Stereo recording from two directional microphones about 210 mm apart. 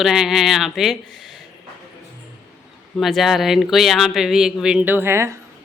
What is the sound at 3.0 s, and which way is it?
Speech, centre (ahead or behind).